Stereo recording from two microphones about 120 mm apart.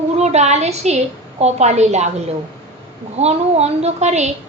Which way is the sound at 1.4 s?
65° right (ahead or behind).